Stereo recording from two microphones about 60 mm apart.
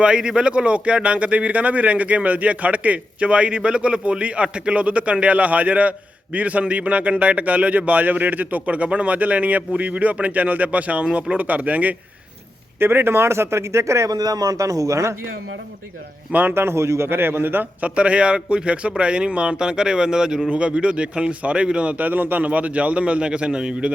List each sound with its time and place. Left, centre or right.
0.0 s a man's voice: centre
12.8 s speech: right
16.3 s a man's voice: right
16.6 s a man's voice: right; by 23.9 s centre